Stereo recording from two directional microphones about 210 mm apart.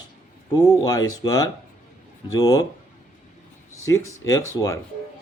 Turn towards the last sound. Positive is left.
turn(degrees=15)  # may be behind; listen again after turning